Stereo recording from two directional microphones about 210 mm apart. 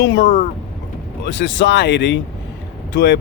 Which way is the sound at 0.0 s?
60° left (ahead or behind).